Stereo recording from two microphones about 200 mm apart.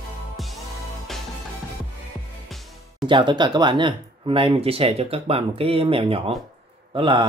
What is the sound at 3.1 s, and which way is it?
Speech, 25° right (ahead or behind).